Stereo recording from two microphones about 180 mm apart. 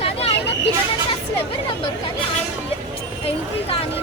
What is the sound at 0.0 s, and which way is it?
Vehicle, 35° left (ahead or behind).